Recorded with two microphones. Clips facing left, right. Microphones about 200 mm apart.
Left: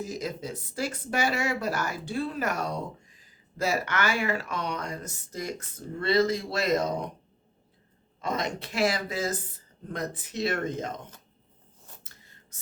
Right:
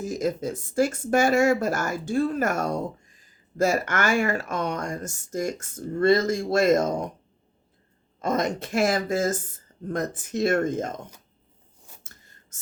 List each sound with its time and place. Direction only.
0.0 s speech: 50° right (ahead or behind)
8.2 s speech: 45° right (ahead or behind)
12.1 s a sound: 45° right (ahead or behind)